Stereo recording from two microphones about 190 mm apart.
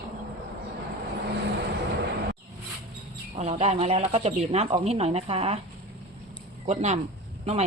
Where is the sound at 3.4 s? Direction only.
35° right (ahead or behind).